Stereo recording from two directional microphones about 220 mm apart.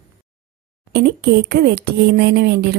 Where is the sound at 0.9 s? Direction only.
50° right (ahead or behind).